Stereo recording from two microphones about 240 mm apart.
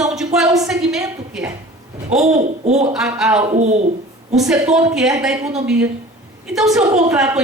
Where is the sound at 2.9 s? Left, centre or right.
Centre.